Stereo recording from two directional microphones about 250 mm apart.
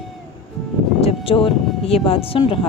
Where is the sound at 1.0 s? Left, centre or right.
Left.